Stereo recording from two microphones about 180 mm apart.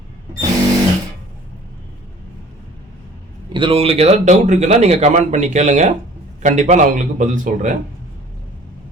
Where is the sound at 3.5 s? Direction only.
30° right (ahead or behind); by 7.7 s 45° right (ahead or behind).